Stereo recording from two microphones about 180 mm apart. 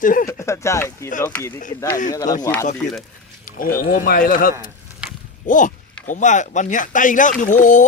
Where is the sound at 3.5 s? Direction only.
50° left (ahead or behind).